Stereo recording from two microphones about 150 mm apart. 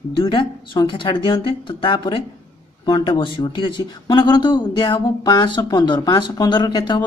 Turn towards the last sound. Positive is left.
turn(degrees=30)  # may be behind; listen again after turning